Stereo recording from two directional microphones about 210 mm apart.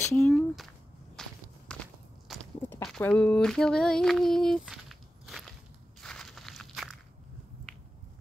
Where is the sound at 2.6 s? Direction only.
5° left (ahead or behind).